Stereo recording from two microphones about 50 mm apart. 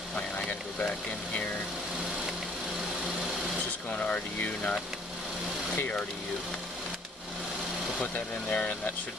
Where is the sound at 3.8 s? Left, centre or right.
Left.